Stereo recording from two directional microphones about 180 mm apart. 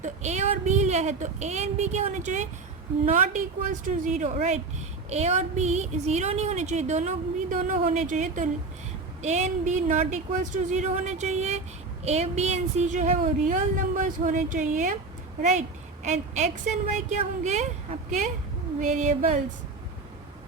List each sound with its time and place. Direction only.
0.0 s a woman's voice: 40° right (ahead or behind)
18.8 s a woman's voice: 45° right (ahead or behind)